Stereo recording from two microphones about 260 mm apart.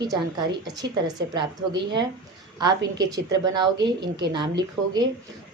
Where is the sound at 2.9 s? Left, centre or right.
Centre.